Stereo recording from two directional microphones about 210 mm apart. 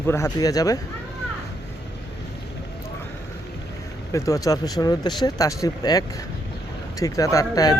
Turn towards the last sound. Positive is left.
turn(degrees=15)  # may be behind; listen again after turning